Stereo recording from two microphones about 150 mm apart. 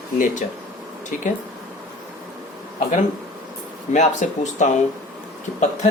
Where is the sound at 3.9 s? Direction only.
50° left (ahead or behind).